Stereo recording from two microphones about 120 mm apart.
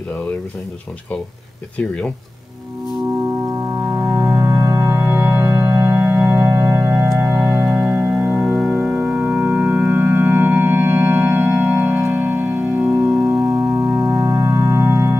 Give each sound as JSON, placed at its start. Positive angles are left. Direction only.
{"t": 1.8, "sound": "speech", "side_deg": 10}
{"t": 3.4, "sound": "organ", "side_deg": -25}